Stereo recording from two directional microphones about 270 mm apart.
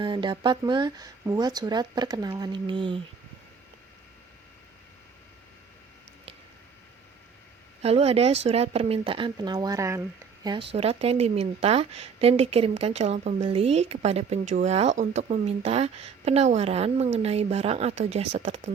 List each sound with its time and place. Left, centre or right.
0.0 s speech: centre
7.8 s speech: right